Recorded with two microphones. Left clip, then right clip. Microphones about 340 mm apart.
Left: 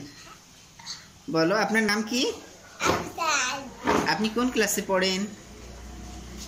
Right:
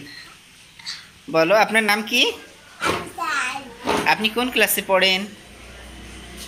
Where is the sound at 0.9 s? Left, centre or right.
Left.